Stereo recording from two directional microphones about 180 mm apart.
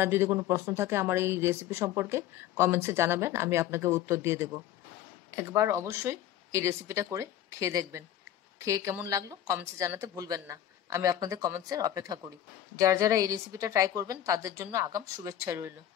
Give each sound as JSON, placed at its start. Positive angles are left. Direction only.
{"t": 0.0, "sound": "a woman's voice", "side_deg": -15}